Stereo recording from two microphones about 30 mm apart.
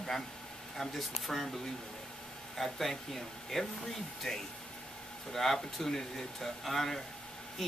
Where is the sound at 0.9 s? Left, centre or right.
Centre.